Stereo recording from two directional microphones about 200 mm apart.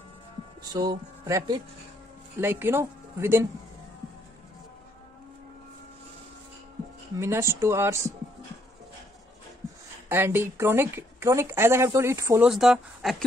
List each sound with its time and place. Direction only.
0.6 s a woman's voice: 20° right (ahead or behind)
7.2 s a woman's voice: 15° right (ahead or behind)
10.0 s a woman's voice: 10° right (ahead or behind)
12.4 s speech: centre (ahead or behind)